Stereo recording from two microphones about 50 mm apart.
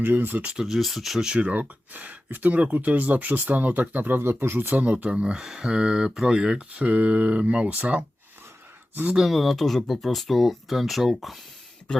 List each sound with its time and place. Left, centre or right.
0.0 s speech: right
0.6 s speech: centre
1.4 s speech: right
4.8 s speech: right
9.1 s speech: centre